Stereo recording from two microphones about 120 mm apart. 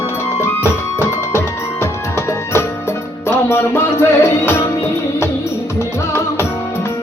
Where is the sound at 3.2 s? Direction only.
20° left (ahead or behind).